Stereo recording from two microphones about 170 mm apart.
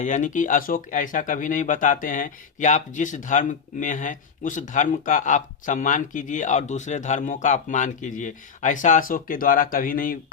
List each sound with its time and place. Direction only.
0.0 s speech: 45° left (ahead or behind)